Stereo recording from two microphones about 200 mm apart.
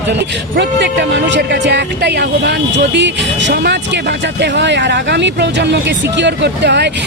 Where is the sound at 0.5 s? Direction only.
60° right (ahead or behind).